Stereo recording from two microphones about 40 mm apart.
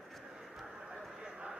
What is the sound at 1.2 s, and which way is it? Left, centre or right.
Clip-clop, centre.